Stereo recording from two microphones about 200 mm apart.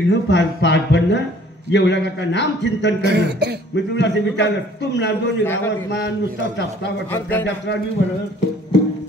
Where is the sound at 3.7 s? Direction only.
60° left (ahead or behind).